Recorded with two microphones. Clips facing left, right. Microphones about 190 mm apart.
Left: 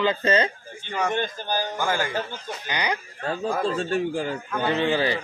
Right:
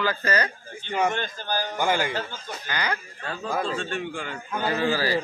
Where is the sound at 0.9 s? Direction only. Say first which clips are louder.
Right 2 dB; 20° right (ahead or behind).